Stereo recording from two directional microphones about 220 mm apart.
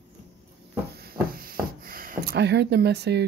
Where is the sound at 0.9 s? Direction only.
45° right (ahead or behind).